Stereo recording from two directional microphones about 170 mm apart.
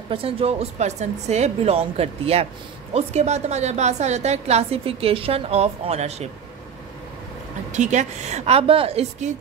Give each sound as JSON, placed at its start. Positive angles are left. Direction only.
{"t": 0.1, "sound": "a woman's voice", "side_deg": -35}
{"t": 7.7, "sound": "a woman's voice", "side_deg": -45}